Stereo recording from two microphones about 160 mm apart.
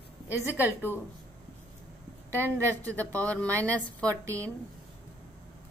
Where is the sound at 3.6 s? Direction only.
10° left (ahead or behind).